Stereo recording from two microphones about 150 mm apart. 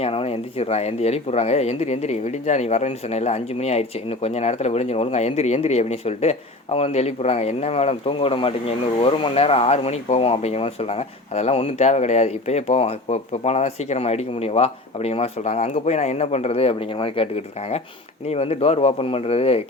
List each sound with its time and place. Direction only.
0.0 s speech: 40° left (ahead or behind)